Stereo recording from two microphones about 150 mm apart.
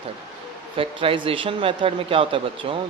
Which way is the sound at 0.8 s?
35° right (ahead or behind).